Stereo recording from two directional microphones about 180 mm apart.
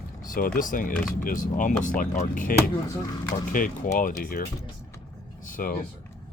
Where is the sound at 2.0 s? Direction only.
45° left (ahead or behind).